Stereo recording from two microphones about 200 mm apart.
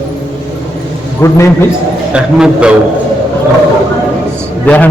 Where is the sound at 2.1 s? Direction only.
5° right (ahead or behind).